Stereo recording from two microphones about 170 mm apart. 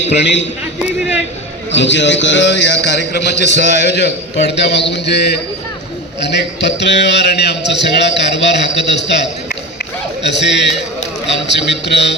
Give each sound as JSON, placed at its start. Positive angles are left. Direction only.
{"t": 0.2, "sound": "a man's voice", "side_deg": 90}
{"t": 1.7, "sound": "a man's voice", "side_deg": 90}